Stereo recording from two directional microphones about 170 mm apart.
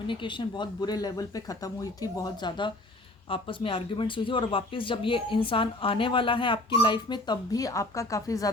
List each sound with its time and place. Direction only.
0.1 s speech: 30° left (ahead or behind)